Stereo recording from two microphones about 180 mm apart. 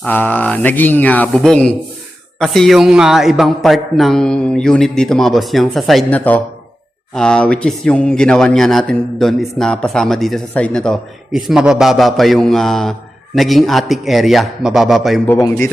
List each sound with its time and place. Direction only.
0.0 s speech: 10° left (ahead or behind)